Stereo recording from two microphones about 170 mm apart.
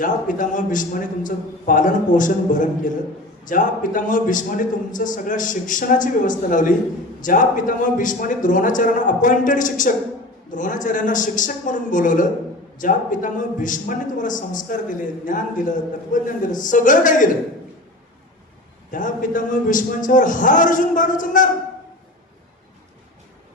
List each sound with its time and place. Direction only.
0.0 s a man's voice: 50° left (ahead or behind)
18.9 s a man's voice: 50° left (ahead or behind)